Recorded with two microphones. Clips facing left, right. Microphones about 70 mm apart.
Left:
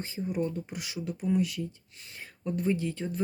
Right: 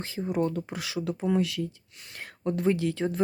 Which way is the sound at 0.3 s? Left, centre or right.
Right.